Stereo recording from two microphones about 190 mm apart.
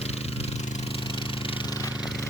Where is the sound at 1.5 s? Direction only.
20° left (ahead or behind).